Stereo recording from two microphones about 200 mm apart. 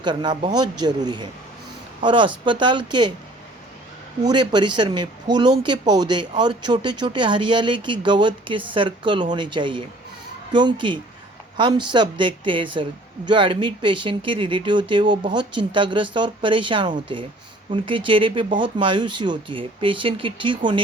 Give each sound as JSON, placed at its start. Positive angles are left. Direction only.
{"t": 0.0, "sound": "speech", "side_deg": -20}
{"t": 4.3, "sound": "speech", "side_deg": -20}